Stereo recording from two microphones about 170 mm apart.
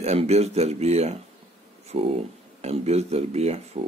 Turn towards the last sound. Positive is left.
turn(degrees=-40)  # may be behind; listen again after turning